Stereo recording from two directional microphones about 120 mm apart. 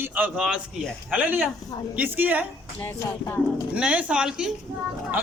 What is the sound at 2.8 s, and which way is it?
Speech, 20° left (ahead or behind).